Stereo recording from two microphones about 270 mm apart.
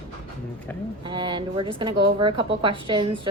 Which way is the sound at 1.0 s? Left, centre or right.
Centre.